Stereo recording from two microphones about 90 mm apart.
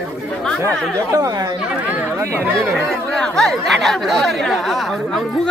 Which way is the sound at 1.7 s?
15° right (ahead or behind).